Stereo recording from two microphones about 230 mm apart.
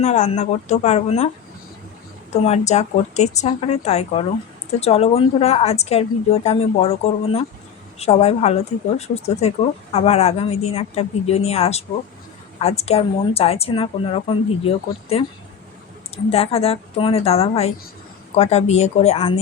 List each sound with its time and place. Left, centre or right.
0.0 s a woman's voice: left
2.4 s a woman's voice: left